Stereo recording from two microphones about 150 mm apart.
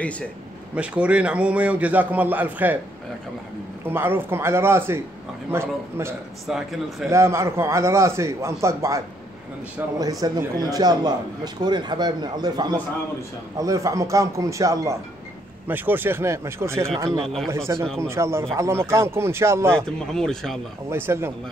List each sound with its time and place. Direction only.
0.7 s a man's voice: 10° right (ahead or behind)
3.8 s a man's voice: 15° right (ahead or behind)
6.4 s speech: centre (ahead or behind)
7.1 s a man's voice: 20° right (ahead or behind)
19.7 s speech: 5° left (ahead or behind)
20.9 s a man's voice: 15° right (ahead or behind)